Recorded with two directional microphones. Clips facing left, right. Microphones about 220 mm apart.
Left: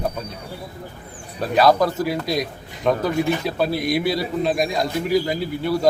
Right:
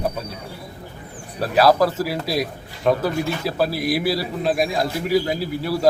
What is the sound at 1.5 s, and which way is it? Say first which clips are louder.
Speech: even; 5° right (ahead or behind).